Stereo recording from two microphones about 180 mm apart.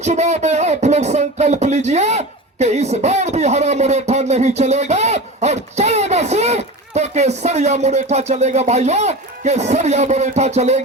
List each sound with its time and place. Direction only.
0.0 s speech: 40° right (ahead or behind)